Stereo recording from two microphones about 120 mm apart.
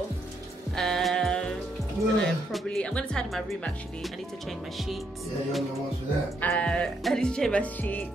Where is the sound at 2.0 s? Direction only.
25° right (ahead or behind).